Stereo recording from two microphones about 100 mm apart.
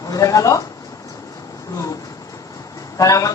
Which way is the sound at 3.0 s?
35° left (ahead or behind).